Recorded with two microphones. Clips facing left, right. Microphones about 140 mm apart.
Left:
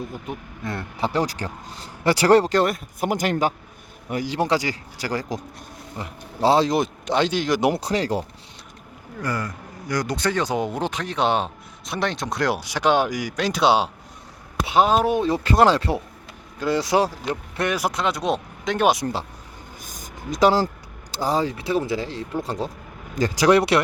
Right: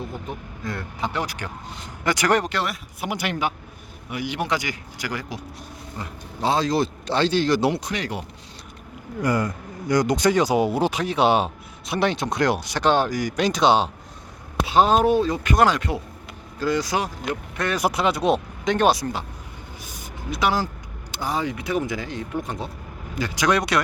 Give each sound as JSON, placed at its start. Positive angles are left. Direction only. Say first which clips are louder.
{"t": 0.6, "sound": "speech", "louder": "left 2 dB", "side_deg": 25}
{"t": 2.6, "sound": "speech", "louder": "left 7 dB", "side_deg": 45}
{"t": 7.8, "sound": "speech", "louder": "left 6 dB", "side_deg": 35}
{"t": 9.2, "sound": "speech", "louder": "right 5 dB", "side_deg": -20}
{"t": 15.1, "sound": "speech", "louder": "even", "side_deg": 25}
{"t": 17.7, "sound": "speech", "louder": "right 2 dB", "side_deg": 0}
{"t": 19.8, "sound": "a sound", "louder": "even", "side_deg": 45}
{"t": 21.1, "sound": "speech", "louder": "left 3 dB", "side_deg": 35}